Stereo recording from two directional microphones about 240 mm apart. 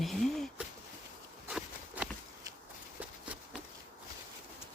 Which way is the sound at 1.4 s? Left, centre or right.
Centre.